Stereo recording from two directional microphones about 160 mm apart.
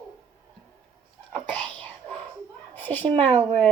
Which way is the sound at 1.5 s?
10° left (ahead or behind).